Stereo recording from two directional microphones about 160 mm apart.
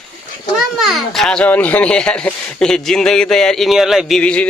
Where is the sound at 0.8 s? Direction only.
Centre (ahead or behind).